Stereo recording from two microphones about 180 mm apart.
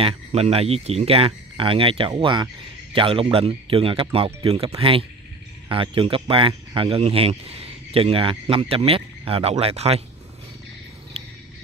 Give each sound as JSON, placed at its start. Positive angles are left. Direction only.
{"t": 0.0, "sound": "speech", "side_deg": -35}